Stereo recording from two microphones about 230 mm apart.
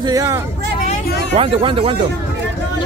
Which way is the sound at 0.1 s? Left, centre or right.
Centre.